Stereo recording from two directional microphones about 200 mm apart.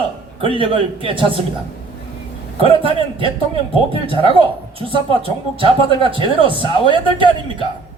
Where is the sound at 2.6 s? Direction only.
25° right (ahead or behind).